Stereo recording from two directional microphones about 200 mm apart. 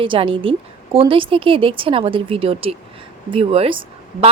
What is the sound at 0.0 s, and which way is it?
Speech, 25° right (ahead or behind).